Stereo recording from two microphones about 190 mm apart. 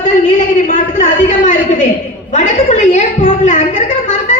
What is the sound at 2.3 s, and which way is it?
A woman's voice, 40° left (ahead or behind).